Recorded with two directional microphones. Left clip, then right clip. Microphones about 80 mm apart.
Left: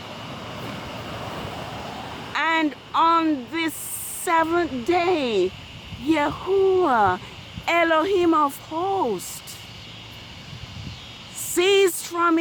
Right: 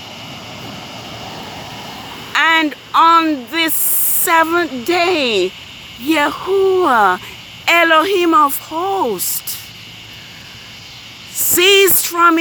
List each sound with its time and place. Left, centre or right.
0.6 s vehicle: centre
1.1 s vehicle: centre
1.7 s a sound: right
4.3 s speech: right
8.7 s speech: right
9.1 s speech: right
11.5 s speech: right